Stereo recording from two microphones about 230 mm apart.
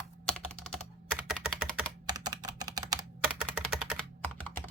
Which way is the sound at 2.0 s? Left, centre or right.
Centre.